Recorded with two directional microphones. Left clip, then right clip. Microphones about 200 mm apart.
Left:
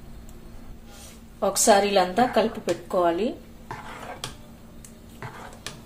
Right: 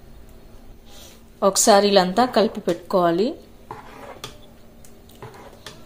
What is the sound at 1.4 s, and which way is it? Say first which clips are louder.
Speech: right 4 dB; 30° right (ahead or behind).